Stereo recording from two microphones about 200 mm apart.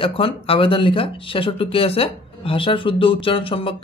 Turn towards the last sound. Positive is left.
turn(degrees=25)  # may be behind; listen again after turning